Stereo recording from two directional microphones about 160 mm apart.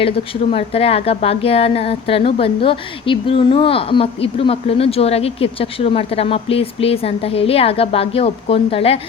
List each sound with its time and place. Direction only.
0.5 s a woman's voice: 40° left (ahead or behind)